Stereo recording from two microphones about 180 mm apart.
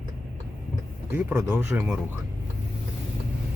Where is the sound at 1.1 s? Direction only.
10° right (ahead or behind).